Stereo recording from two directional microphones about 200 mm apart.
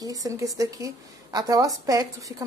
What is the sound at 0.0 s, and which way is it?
A woman's voice, 15° right (ahead or behind).